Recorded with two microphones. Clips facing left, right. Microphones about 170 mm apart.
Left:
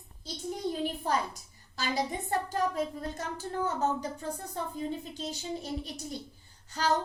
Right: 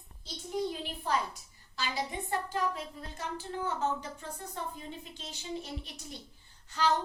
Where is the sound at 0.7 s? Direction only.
40° left (ahead or behind).